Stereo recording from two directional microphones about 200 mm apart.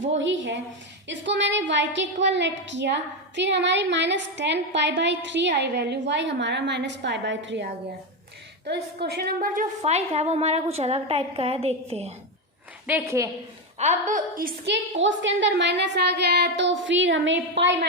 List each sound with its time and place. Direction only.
0.1 s a woman's voice: 65° right (ahead or behind); by 12.1 s 30° right (ahead or behind)
12.9 s a woman's voice: 15° right (ahead or behind)
13.7 s a woman's voice: 35° right (ahead or behind)
14.7 s a woman's voice: 65° right (ahead or behind)